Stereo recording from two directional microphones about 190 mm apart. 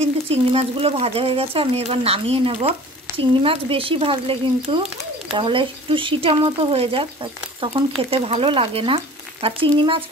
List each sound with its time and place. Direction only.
0.0 s speech: 30° right (ahead or behind)